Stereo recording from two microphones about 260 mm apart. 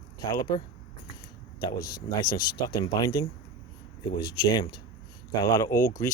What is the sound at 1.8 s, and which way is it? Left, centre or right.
Speech, left.